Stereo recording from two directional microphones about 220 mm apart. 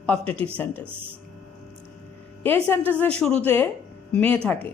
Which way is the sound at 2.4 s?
10° left (ahead or behind).